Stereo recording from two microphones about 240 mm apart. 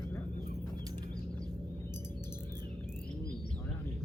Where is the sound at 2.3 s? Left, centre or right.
Centre.